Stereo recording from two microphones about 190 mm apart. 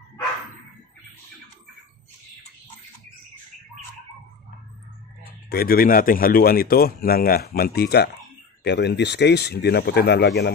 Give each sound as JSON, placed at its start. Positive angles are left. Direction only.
{"t": 5.5, "sound": "speech", "side_deg": 50}